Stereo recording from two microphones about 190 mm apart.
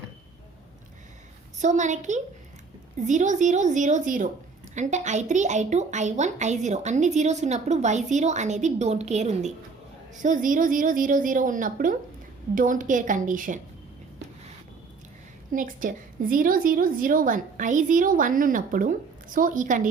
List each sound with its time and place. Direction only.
1.5 s a woman's voice: 40° right (ahead or behind)
15.5 s a woman's voice: 45° right (ahead or behind)